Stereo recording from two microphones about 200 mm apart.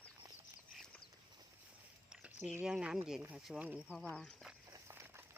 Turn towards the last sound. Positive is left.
turn(degrees=-10)  # may be behind; listen again after turning